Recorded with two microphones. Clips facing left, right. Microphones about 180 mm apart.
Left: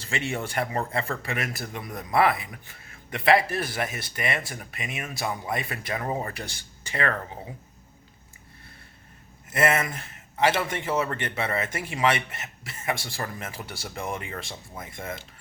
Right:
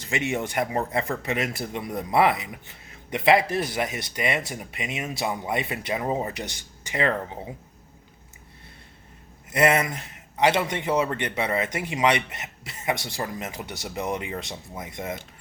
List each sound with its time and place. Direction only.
0.0 s speech: 15° right (ahead or behind)
9.5 s a man's voice: 20° right (ahead or behind)